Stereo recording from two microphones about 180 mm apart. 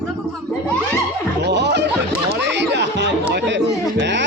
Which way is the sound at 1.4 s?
70° right (ahead or behind).